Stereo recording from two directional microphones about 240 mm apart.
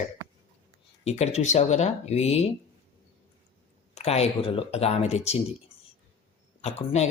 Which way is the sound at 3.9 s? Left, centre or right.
Left.